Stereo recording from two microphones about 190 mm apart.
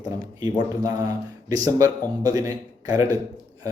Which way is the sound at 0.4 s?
20° right (ahead or behind).